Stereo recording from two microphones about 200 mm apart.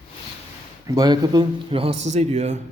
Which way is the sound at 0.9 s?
20° right (ahead or behind).